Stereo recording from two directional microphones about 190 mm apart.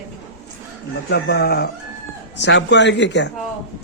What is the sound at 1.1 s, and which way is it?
Speech, 60° left (ahead or behind).